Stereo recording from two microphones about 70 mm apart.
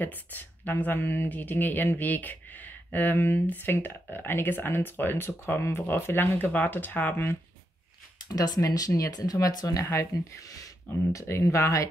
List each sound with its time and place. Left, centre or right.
0.0 s speech: left
8.3 s speech: left